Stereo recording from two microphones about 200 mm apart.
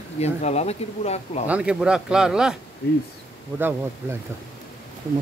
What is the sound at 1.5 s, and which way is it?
Speech, 5° right (ahead or behind).